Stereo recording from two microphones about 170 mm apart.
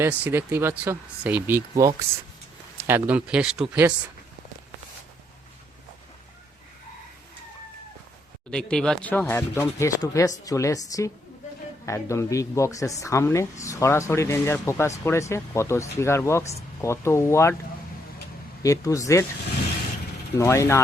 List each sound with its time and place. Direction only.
0.0 s speech: 10° right (ahead or behind)
8.4 s speech: 5° left (ahead or behind)
18.6 s speech: 20° left (ahead or behind)
20.4 s speech: 15° left (ahead or behind)